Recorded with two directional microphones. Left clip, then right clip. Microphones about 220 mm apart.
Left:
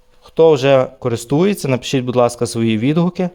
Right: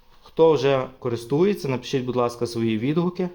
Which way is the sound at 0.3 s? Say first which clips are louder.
Left 7 dB; 50° left (ahead or behind).